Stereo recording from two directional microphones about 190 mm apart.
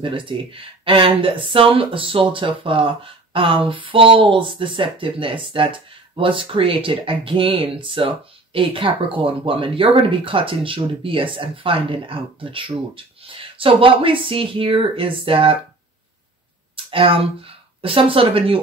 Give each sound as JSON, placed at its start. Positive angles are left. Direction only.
{"t": 0.0, "sound": "speech", "side_deg": -25}
{"t": 16.7, "sound": "speech", "side_deg": -30}